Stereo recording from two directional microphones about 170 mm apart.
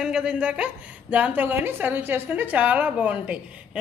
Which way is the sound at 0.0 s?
5° right (ahead or behind).